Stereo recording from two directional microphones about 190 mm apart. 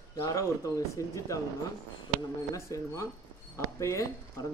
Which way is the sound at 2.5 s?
15° left (ahead or behind).